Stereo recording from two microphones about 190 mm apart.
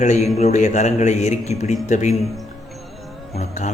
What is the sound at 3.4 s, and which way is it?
Speech, 40° left (ahead or behind).